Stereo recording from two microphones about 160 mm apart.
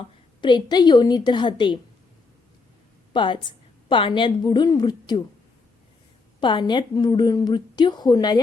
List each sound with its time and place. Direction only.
0.4 s a woman's voice: 25° left (ahead or behind)
3.1 s a woman's voice: 30° left (ahead or behind)
6.4 s a woman's voice: 30° left (ahead or behind)